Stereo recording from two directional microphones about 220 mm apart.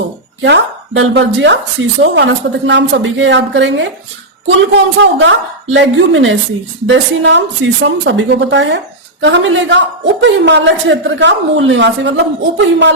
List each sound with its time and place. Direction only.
0.4 s a woman's voice: 50° right (ahead or behind)
4.9 s a woman's voice: 55° right (ahead or behind)